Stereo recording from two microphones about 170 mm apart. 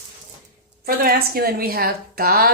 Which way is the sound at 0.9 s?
60° right (ahead or behind).